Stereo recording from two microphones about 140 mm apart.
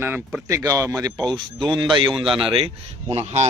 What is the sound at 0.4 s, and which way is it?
Speech, 20° right (ahead or behind).